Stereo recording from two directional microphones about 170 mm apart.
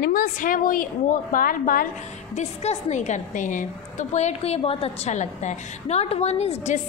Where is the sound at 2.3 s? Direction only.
40° left (ahead or behind).